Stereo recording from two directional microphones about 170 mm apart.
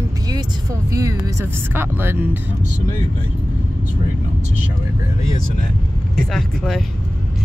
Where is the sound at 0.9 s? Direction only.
20° right (ahead or behind).